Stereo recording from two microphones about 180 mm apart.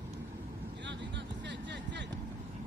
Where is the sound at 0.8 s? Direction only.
80° right.